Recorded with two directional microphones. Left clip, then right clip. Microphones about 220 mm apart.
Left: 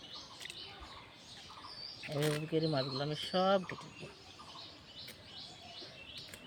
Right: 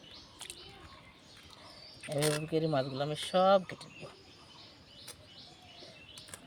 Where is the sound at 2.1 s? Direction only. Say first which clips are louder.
Right 3 dB; 20° right (ahead or behind).